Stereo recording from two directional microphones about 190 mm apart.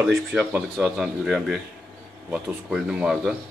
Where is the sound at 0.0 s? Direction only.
5° right (ahead or behind).